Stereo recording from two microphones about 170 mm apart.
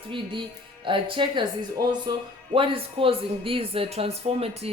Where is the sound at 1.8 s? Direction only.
65° right (ahead or behind).